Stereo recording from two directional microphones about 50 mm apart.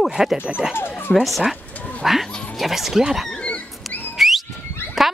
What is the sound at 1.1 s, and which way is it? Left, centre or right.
Speech, centre.